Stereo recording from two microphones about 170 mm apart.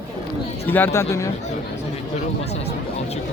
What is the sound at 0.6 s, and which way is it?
Speech, 10° left (ahead or behind).